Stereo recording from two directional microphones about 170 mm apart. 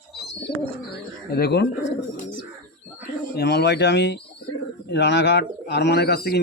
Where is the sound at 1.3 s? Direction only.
70° left (ahead or behind).